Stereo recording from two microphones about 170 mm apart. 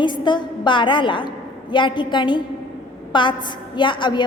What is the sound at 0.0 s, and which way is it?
A woman's voice, 25° left (ahead or behind).